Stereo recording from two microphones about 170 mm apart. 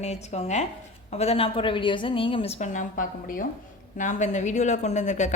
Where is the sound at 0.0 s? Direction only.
40° left (ahead or behind).